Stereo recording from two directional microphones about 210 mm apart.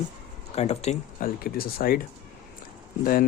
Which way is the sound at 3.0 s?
45° left (ahead or behind).